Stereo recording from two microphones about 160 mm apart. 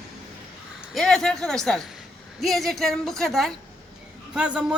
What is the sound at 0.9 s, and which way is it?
A man's voice, 5° left (ahead or behind).